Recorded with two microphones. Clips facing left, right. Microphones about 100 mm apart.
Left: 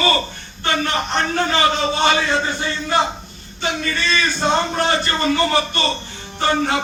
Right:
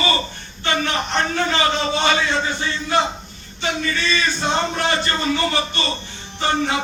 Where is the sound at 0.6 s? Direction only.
45° left (ahead or behind).